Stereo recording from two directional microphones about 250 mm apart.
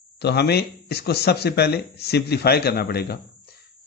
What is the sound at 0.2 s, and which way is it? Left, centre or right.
A man's voice, left.